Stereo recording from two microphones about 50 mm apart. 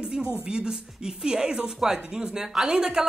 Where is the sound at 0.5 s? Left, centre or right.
Centre.